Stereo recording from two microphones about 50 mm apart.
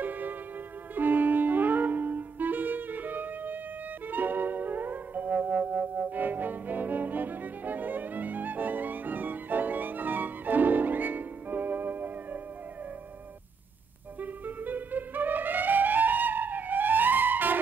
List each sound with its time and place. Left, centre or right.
0.0 s music: right
14.2 s music: right